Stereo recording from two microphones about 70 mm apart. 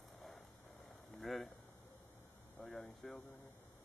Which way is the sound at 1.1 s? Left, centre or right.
Centre.